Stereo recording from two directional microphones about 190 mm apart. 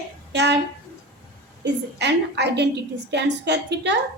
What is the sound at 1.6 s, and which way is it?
Speech, 65° right (ahead or behind).